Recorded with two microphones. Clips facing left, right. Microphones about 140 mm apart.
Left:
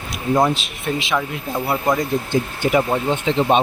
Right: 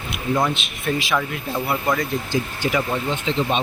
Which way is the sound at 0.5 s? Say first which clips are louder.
Left 1 dB; 30° left (ahead or behind).